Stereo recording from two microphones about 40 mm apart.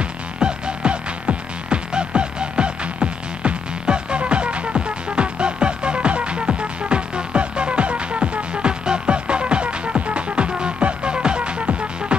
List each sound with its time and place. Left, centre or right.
0.4 s music: right